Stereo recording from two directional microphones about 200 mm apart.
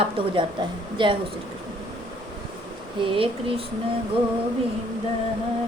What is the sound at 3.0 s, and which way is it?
Speech, 25° right (ahead or behind).